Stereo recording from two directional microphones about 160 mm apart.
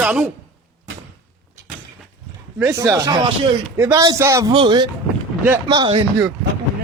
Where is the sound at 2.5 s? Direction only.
15° right (ahead or behind).